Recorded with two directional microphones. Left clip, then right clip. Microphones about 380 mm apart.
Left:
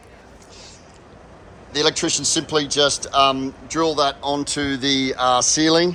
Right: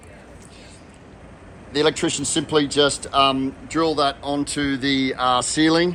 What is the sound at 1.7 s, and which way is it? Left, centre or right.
Speech, centre.